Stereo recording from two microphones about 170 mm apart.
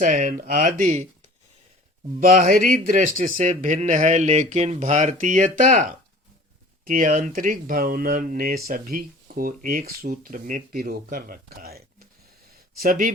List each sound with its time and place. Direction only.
0.0 s speech: 50° right (ahead or behind)
2.4 s speech: 60° right (ahead or behind)